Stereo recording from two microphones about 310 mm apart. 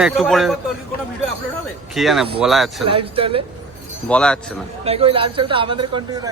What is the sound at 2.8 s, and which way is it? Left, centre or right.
Speech, centre.